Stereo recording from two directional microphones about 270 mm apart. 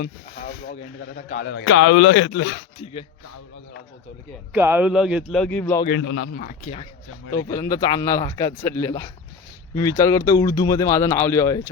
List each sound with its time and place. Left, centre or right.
0.0 s a man's voice: left
2.7 s speech: centre
4.5 s speech: centre
6.0 s a man's voice: left
7.3 s speech: centre